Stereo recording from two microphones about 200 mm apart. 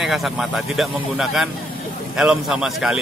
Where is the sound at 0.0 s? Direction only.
Centre (ahead or behind).